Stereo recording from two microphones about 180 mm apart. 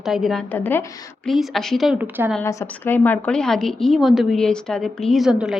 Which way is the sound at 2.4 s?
15° left (ahead or behind).